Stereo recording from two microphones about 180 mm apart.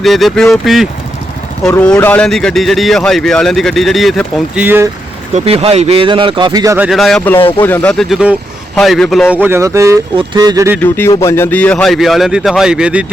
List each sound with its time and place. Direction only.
0.0 s speech: centre (ahead or behind)
4.6 s speech: 10° right (ahead or behind)
5.3 s speech: 35° right (ahead or behind)
6.7 s speech: 5° right (ahead or behind)
7.3 s speech: 30° left (ahead or behind)
7.6 s speech: 10° left (ahead or behind)
9.3 s speech: 10° right (ahead or behind)
10.8 s speech: 10° left (ahead or behind); by 13.1 s 5° right (ahead or behind)